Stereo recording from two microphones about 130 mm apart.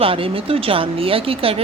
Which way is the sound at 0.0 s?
45° right (ahead or behind).